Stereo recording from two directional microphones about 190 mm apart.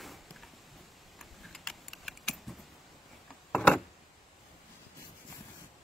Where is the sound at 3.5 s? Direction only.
5° left (ahead or behind).